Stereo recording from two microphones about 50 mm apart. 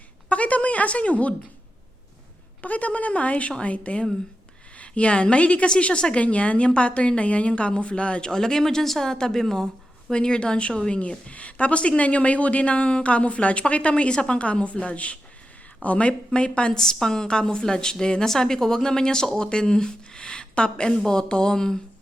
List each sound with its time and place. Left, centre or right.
0.3 s a woman's voice: left
2.6 s a woman's voice: left; by 21.8 s centre